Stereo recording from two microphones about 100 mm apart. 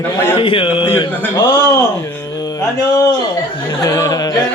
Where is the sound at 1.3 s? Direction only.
30° left (ahead or behind).